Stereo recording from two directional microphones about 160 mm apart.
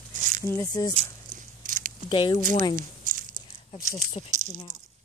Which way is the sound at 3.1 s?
60° right (ahead or behind).